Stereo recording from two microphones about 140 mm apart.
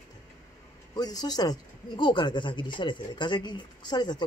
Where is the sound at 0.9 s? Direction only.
30° left (ahead or behind).